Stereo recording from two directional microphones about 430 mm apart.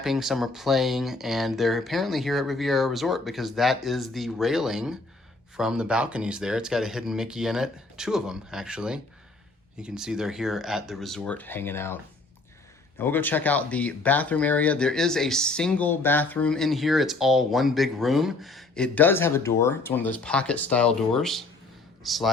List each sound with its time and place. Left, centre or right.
0.0 s speech: centre
13.0 s a man's voice: centre